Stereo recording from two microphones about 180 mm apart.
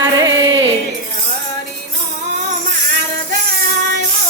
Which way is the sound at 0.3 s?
80° right.